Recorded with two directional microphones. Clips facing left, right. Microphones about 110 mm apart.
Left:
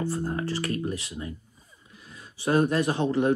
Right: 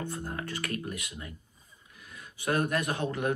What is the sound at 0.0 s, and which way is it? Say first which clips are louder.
Speech: left 7 dB; 35° left (ahead or behind).